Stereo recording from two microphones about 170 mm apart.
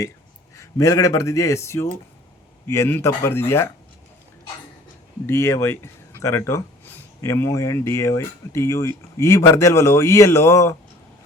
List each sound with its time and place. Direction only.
0.5 s speech: 20° left (ahead or behind)
5.2 s speech: 15° left (ahead or behind)